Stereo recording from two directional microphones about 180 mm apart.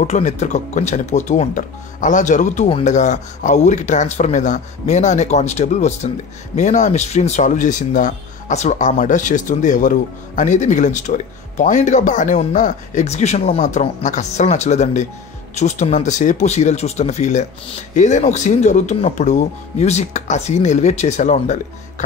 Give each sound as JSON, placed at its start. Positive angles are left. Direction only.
{"t": 0.0, "sound": "speech", "side_deg": 40}